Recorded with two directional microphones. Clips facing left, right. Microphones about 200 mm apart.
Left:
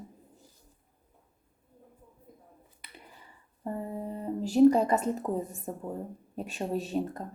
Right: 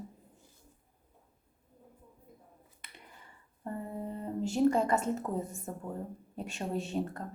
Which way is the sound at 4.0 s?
15° left (ahead or behind).